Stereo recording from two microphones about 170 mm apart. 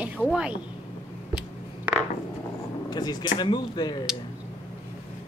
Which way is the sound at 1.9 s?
10° right (ahead or behind).